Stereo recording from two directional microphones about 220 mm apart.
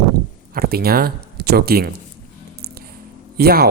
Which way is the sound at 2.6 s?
45° right (ahead or behind).